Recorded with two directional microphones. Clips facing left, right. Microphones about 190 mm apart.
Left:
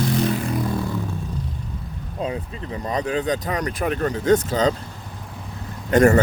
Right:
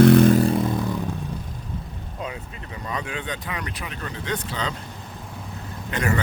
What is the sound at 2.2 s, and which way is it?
Speech, 30° left (ahead or behind).